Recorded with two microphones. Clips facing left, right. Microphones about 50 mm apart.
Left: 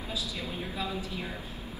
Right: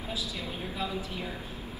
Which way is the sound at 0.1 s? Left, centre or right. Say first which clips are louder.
Even; left.